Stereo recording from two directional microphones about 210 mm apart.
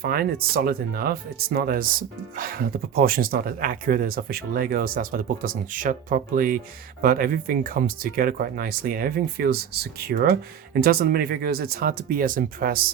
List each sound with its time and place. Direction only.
0.0 s speech: 45° right (ahead or behind)